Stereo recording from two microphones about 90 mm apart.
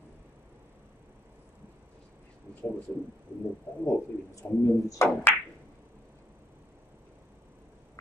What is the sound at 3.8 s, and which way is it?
Speech, 35° left (ahead or behind).